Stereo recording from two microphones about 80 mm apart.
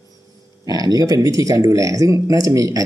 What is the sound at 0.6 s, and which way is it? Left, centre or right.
Speech, right.